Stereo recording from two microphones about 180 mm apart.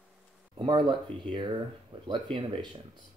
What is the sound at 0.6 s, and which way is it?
Speech, 25° right (ahead or behind).